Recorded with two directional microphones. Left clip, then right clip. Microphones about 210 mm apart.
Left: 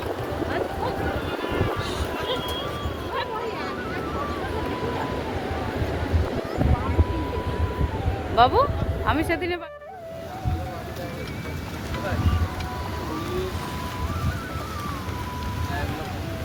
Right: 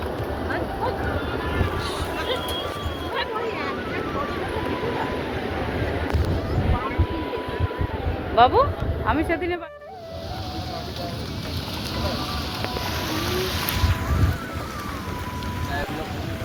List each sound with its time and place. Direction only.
8.4 s speech: 20° left (ahead or behind)